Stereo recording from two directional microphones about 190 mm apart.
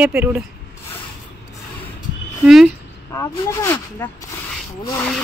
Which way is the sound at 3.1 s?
10° left (ahead or behind).